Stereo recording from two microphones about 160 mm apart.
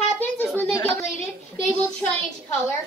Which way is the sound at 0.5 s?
10° left (ahead or behind).